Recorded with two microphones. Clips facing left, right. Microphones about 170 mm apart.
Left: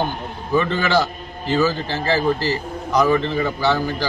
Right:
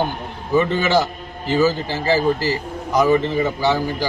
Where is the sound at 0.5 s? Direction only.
20° right (ahead or behind).